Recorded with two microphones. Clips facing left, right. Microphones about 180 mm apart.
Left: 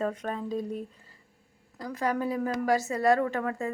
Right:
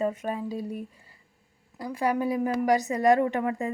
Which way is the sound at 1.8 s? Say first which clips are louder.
Right 3 dB; 10° right (ahead or behind).